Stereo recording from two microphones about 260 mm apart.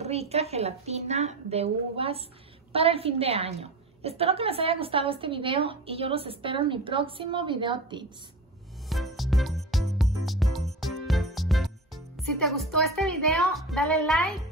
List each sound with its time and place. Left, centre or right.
0.0 s a woman's voice: right
8.8 s music: centre